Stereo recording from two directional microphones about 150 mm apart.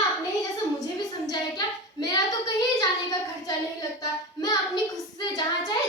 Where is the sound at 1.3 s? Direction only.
25° left (ahead or behind).